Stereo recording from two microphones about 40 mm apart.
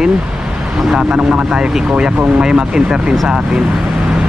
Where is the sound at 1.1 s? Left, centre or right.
Right.